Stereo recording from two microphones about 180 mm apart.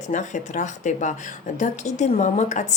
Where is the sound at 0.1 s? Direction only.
45° left (ahead or behind).